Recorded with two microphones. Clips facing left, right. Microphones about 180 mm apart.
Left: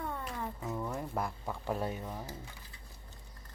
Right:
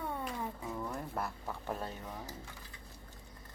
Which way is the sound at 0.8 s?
10° left (ahead or behind).